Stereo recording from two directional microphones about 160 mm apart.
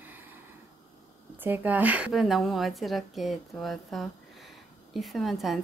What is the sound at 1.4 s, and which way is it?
A woman's voice, 10° right (ahead or behind).